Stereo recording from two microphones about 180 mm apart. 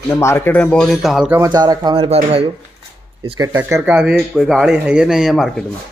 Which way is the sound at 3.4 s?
15° right (ahead or behind).